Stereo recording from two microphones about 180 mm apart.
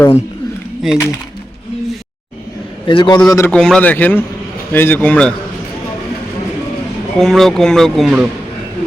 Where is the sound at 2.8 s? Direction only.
25° left (ahead or behind).